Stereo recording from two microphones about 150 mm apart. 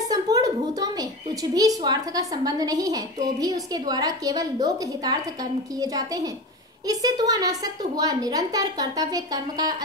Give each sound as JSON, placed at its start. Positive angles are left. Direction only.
{"t": 0.0, "sound": "a woman's voice", "side_deg": -25}